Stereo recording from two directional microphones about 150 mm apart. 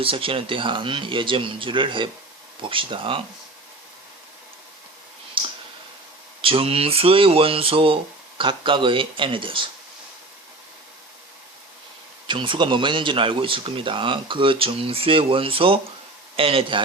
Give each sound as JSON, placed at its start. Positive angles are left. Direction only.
{"t": 0.0, "sound": "speech", "side_deg": -35}
{"t": 5.4, "sound": "clicking", "side_deg": -35}
{"t": 6.4, "sound": "speech", "side_deg": -40}
{"t": 12.3, "sound": "speech", "side_deg": -35}